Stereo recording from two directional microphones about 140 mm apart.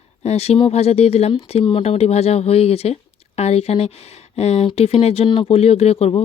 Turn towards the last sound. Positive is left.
turn(degrees=45)  # may be behind; listen again after turning